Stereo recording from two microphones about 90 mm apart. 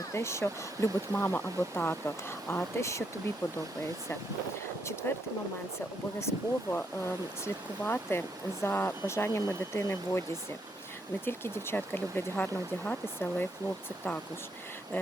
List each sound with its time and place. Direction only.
0.1 s speech: 30° left (ahead or behind)
5.0 s speech: 25° left (ahead or behind)
11.3 s speech: 25° left (ahead or behind)